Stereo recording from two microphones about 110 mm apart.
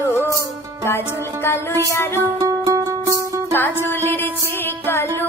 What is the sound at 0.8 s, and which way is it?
Music, 20° left (ahead or behind).